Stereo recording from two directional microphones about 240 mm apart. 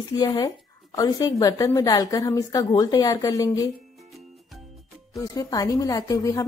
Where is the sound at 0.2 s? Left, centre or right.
Centre.